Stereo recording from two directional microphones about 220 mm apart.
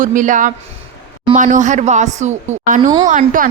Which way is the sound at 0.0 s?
35° right (ahead or behind).